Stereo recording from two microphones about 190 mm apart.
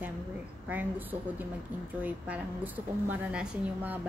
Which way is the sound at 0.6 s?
10° right (ahead or behind).